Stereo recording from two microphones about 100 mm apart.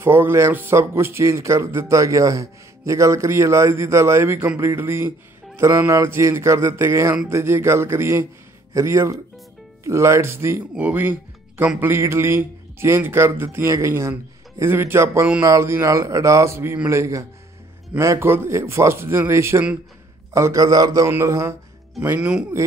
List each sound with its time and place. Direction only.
0.0 s speech: 25° right (ahead or behind)
21.1 s speech: 25° right (ahead or behind)
22.0 s speech: 15° right (ahead or behind)